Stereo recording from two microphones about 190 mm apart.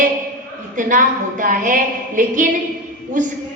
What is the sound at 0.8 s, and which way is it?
A woman's voice, 45° right (ahead or behind).